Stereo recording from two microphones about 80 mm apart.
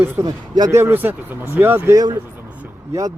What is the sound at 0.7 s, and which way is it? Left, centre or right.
Speech, right.